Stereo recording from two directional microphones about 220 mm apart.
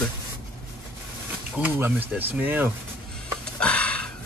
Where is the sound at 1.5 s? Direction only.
5° right (ahead or behind).